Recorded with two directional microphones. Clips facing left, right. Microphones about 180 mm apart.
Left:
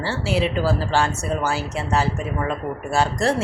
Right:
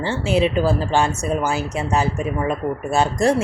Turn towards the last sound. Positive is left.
turn(degrees=-20)  # may be behind; listen again after turning